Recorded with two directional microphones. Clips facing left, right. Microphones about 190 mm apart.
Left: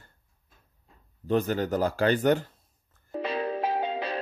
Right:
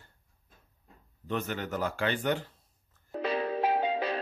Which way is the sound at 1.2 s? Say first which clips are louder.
Left 8 dB; 35° left (ahead or behind).